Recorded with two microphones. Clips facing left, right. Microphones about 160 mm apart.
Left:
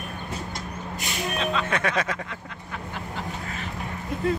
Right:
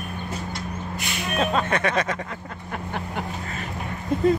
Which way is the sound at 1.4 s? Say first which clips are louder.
Right 5 dB; 45° right (ahead or behind).